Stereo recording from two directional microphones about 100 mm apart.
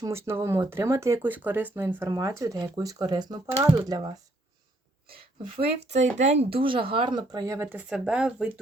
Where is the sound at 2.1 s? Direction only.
30° right (ahead or behind).